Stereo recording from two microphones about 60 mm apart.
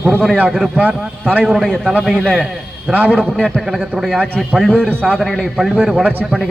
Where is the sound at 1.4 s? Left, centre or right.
Centre.